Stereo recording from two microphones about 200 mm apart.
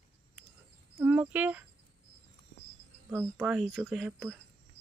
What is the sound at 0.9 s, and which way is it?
Speech, 10° right (ahead or behind).